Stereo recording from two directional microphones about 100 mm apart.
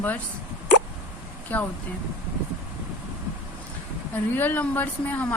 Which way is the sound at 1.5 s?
15° left (ahead or behind).